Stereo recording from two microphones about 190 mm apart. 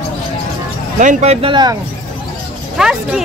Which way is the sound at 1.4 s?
25° right (ahead or behind).